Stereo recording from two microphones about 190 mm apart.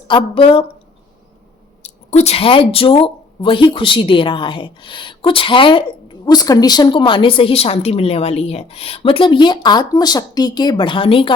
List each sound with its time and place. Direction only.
0.1 s a woman's voice: 25° left (ahead or behind)
1.8 s a woman's voice: 35° left (ahead or behind)